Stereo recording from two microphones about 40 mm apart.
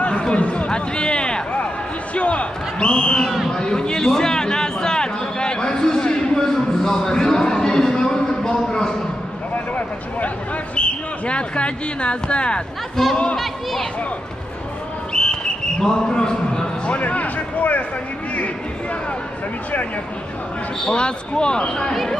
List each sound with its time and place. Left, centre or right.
0.3 s a man's voice: left
3.3 s speech: centre
3.5 s a sound: centre
9.5 s speech: left
10.8 s speech: left
13.0 s speech: centre
15.2 s a sound: left
15.8 s a man's voice: centre
17.0 s speech: left
20.9 s a man's voice: left